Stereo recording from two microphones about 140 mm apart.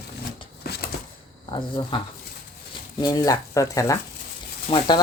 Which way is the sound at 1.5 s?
35° left (ahead or behind).